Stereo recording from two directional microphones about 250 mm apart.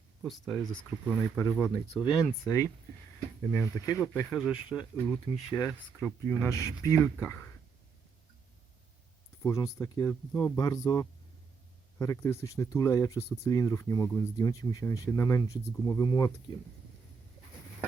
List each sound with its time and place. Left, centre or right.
0.2 s speech: centre
1.2 s speech: centre
4.3 s speech: centre
4.5 s speech: centre
9.4 s speech: centre